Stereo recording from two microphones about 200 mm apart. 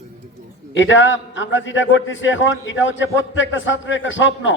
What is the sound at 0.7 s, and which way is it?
A man's voice, 70° left (ahead or behind).